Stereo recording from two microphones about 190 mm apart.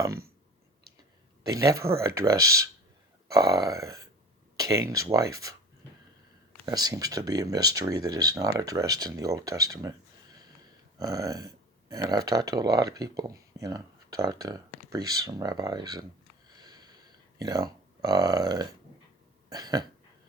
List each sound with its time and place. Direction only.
1.5 s speech: 20° right (ahead or behind)
6.7 s speech: 20° right (ahead or behind)
10.9 s speech: 20° right (ahead or behind)
16.6 s sniff: 20° right (ahead or behind)
17.4 s speech: 20° right (ahead or behind)